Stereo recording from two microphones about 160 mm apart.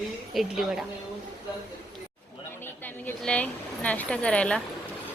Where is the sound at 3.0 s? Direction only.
10° left (ahead or behind).